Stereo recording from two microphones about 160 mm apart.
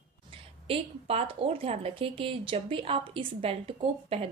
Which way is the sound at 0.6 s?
40° right (ahead or behind).